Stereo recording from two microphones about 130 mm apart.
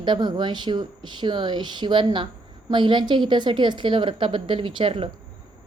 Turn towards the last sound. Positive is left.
turn(degrees=-45)  # may be behind; listen again after turning